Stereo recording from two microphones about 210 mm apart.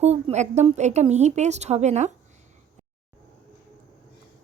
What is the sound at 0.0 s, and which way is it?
A woman's voice, 30° right (ahead or behind).